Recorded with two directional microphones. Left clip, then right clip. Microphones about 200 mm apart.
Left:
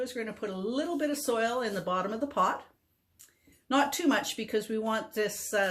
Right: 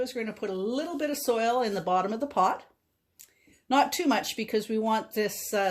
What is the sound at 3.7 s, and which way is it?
Speech, 40° right (ahead or behind).